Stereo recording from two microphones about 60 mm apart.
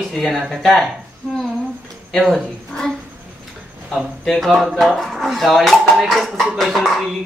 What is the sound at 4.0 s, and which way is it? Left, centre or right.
Speech, centre.